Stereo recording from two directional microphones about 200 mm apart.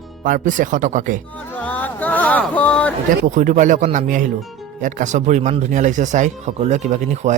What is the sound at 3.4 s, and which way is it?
Speech, 40° right (ahead or behind).